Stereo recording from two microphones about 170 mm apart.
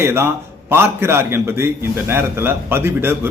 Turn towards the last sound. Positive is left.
turn(degrees=-15)  # may be behind; listen again after turning